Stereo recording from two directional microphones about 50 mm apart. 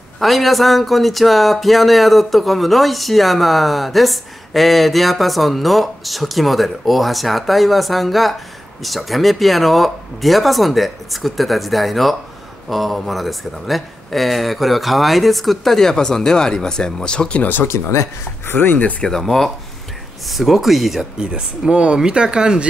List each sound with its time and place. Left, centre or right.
0.2 s speech: centre
17.4 s speech: left
17.6 s speech: left
18.5 s speech: left
18.8 s speech: left
19.0 s speech: centre
20.2 s speech: centre
21.0 s speech: centre